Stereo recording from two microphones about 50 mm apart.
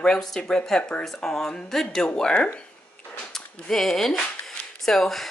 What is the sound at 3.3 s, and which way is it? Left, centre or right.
Speech, centre.